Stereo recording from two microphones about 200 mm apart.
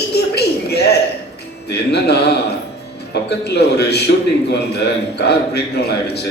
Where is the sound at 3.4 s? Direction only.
55° left (ahead or behind).